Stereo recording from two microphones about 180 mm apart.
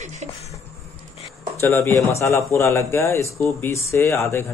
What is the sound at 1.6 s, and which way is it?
Speech, 15° left (ahead or behind).